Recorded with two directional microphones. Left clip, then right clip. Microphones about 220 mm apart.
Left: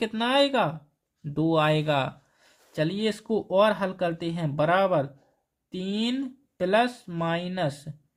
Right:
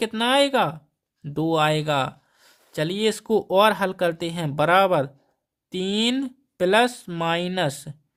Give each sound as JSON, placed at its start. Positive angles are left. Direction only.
{"t": 0.0, "sound": "speech", "side_deg": -25}